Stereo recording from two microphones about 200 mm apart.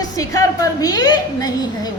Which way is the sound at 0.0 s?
20° left (ahead or behind).